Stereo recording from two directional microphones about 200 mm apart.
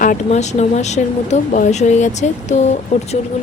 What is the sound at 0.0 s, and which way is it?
Speech, 40° left (ahead or behind).